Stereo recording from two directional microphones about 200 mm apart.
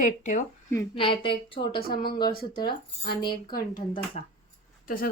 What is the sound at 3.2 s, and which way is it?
Speech, 20° left (ahead or behind).